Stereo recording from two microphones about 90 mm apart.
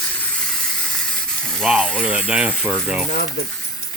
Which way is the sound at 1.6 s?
15° right (ahead or behind).